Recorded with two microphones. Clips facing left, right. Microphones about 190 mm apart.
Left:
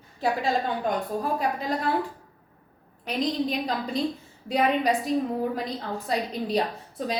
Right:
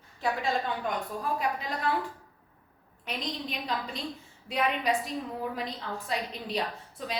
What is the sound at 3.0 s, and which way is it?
A woman's voice, 35° left (ahead or behind).